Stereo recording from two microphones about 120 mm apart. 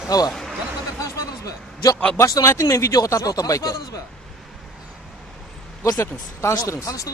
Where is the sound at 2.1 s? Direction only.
25° left (ahead or behind).